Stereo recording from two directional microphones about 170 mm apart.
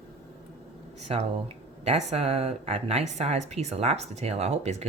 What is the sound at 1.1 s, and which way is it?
Speech, 35° right (ahead or behind).